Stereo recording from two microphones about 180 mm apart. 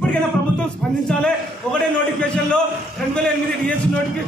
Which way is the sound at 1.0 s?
5° left (ahead or behind).